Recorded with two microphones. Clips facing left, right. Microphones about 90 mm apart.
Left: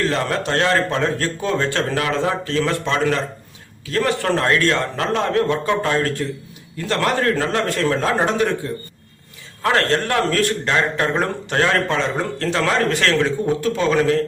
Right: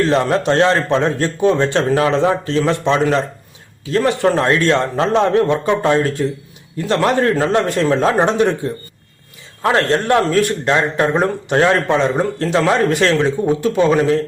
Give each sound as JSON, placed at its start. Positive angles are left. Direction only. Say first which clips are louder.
{"t": 0.1, "sound": "a man's voice", "louder": "right 6 dB", "side_deg": -20}
{"t": 9.6, "sound": "a man's voice", "louder": "right 4 dB", "side_deg": -20}